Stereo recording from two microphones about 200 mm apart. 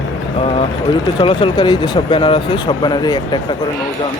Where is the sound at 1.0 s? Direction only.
25° left (ahead or behind).